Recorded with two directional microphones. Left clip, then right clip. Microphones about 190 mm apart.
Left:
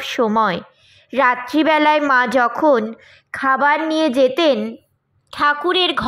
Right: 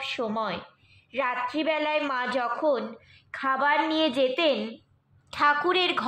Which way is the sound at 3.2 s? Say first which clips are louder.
Left 9 dB; 35° left (ahead or behind).